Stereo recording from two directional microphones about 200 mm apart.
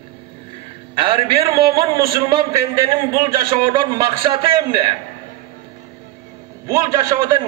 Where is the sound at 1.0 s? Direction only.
25° right (ahead or behind).